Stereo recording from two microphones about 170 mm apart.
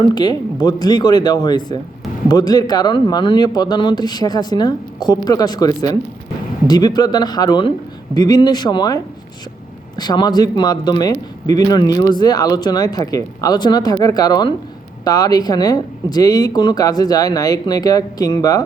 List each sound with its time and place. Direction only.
0.0 s speech: 25° left (ahead or behind)
10.0 s speech: 25° left (ahead or behind)